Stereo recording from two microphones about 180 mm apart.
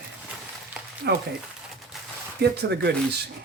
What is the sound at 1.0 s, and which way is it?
Speech, 65° right (ahead or behind).